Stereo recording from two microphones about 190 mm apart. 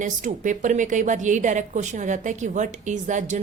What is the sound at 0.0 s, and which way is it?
A woman's voice, 45° right (ahead or behind).